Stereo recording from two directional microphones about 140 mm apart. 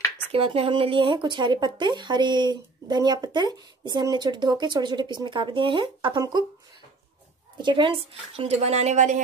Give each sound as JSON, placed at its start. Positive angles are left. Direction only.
{"t": 0.3, "sound": "speech", "side_deg": -40}
{"t": 7.5, "sound": "a woman's voice", "side_deg": -35}